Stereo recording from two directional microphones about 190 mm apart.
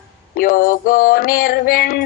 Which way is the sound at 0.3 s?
50° left (ahead or behind).